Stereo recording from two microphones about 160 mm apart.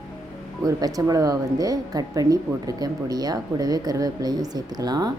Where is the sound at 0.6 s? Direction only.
25° right (ahead or behind).